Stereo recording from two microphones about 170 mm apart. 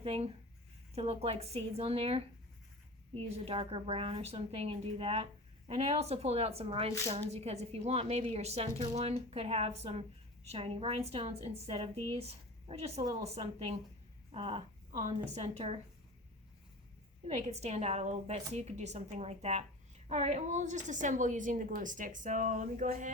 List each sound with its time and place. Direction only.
0.0 s a woman's voice: 35° right (ahead or behind)
3.2 s a woman's voice: 35° right (ahead or behind)
17.2 s a woman's voice: 40° right (ahead or behind)